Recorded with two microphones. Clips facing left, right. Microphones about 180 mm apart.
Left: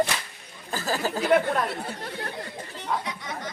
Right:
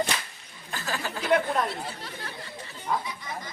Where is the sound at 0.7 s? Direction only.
40° left (ahead or behind).